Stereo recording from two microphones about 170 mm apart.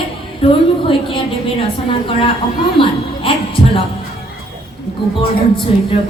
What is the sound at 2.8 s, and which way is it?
Speech, 30° left (ahead or behind).